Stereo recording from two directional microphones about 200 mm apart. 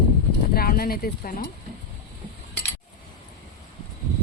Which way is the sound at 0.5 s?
50° left (ahead or behind).